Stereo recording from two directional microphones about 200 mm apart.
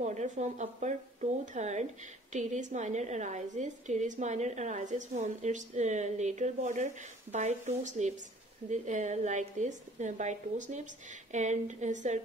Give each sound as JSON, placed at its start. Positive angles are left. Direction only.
{"t": 0.0, "sound": "a woman's voice", "side_deg": -35}